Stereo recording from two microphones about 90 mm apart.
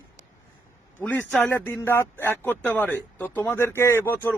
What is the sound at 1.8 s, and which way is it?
Speech, 25° left (ahead or behind).